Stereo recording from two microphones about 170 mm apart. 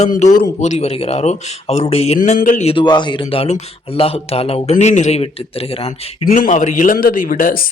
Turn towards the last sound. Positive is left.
turn(degrees=55)  # may be behind; listen again after turning